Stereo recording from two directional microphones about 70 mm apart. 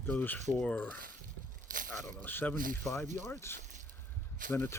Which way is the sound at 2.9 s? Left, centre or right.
Left.